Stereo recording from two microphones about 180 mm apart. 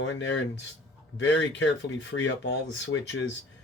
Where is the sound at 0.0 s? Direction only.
90° left.